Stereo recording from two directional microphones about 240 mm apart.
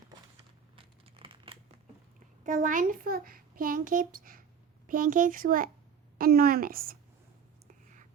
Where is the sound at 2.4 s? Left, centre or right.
Right.